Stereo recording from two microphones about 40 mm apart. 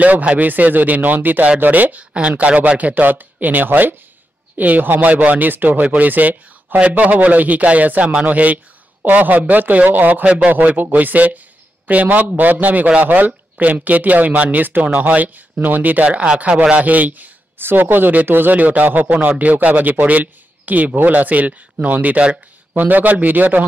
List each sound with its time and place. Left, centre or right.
0.0 s a man's voice: right
2.1 s a man's voice: right
13.0 s a man's voice: right
16.1 s speech: right
16.7 s a man's voice: right
17.6 s speech: right
18.6 s a man's voice: right
19.2 s a man's voice: right